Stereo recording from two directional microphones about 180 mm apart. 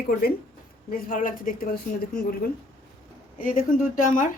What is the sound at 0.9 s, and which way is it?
Speech, 50° left (ahead or behind).